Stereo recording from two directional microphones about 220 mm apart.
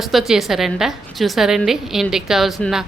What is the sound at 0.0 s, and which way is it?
Speech, centre (ahead or behind).